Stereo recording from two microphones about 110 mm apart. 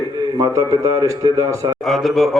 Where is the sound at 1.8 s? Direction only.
Centre (ahead or behind).